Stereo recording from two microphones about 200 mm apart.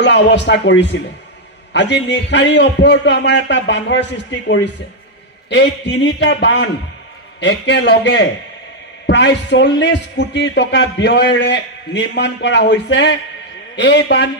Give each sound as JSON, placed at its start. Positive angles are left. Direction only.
{"t": 0.0, "sound": "a man's voice", "side_deg": 60}